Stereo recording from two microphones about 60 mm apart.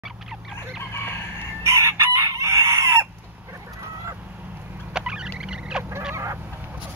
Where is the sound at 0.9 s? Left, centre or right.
Left.